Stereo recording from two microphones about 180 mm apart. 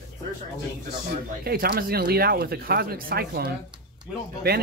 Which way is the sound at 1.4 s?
55° right (ahead or behind).